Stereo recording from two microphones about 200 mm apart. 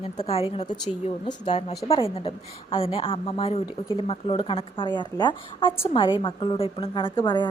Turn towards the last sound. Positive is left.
turn(degrees=25)  # may be behind; listen again after turning